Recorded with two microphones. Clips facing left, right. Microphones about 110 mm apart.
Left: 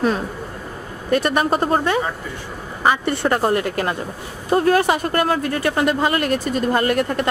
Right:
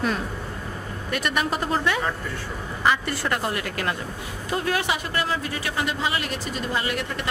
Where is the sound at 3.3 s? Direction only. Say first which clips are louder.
Left 9 dB; 40° left (ahead or behind).